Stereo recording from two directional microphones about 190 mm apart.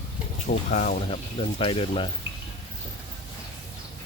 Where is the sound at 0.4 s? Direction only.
40° left (ahead or behind).